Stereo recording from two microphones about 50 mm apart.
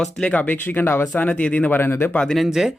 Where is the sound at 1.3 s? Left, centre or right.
Left.